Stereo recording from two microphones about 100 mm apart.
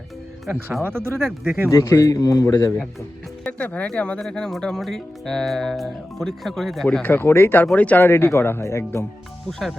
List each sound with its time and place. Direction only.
0.9 s speech: 25° right (ahead or behind)
1.7 s a man's voice: 35° left (ahead or behind)
3.4 s speech: 15° left (ahead or behind)
7.0 s speech: 20° left (ahead or behind)
9.5 s speech: 5° left (ahead or behind)